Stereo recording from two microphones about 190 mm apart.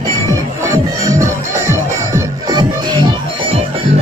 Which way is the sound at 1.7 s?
20° right (ahead or behind).